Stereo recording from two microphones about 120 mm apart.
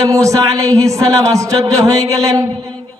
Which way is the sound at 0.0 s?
25° right (ahead or behind).